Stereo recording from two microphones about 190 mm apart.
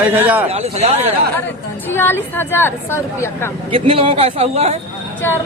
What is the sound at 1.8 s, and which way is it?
Speech, 10° left (ahead or behind).